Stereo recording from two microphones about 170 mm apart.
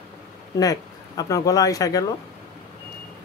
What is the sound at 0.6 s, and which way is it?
Speech, 20° left (ahead or behind).